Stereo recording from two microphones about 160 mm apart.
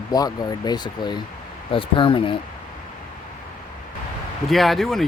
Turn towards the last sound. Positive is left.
turn(degrees=0)  # may be behind; listen again after turning